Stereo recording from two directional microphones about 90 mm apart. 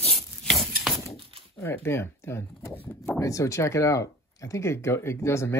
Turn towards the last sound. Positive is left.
turn(degrees=30)  # may be behind; listen again after turning